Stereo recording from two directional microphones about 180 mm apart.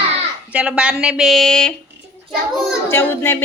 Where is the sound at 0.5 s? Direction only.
5° right (ahead or behind).